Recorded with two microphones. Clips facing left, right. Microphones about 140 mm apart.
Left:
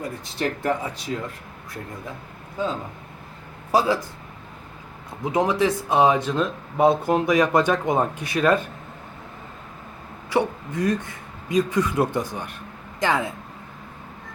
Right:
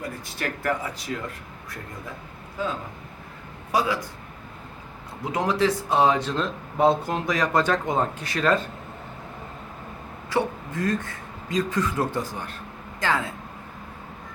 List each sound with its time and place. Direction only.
0.3 s speech: 25° left (ahead or behind)
3.7 s a man's voice: 30° left (ahead or behind)
5.3 s speech: 15° left (ahead or behind)
10.2 s speech: 15° left (ahead or behind)